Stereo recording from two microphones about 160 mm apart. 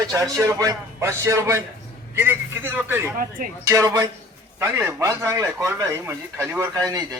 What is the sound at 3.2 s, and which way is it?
Speech, 60° right (ahead or behind).